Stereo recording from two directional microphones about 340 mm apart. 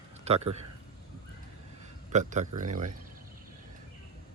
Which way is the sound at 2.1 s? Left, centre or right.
Right.